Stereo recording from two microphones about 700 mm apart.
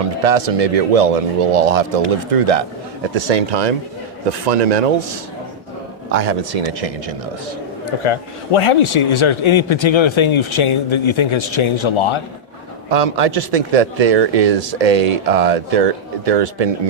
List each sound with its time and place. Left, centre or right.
0.2 s speech: right
6.1 s speech: right
8.0 s speech: left
12.9 s speech: right